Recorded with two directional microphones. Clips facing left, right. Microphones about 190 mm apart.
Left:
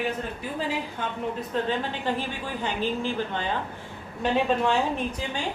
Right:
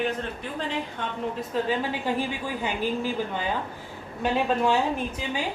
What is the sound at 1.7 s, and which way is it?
A woman's voice, 10° right (ahead or behind).